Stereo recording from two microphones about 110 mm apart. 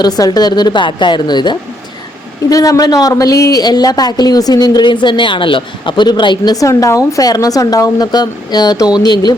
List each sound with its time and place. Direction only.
0.0 s a woman's voice: 40° left (ahead or behind)
2.5 s a woman's voice: 30° left (ahead or behind)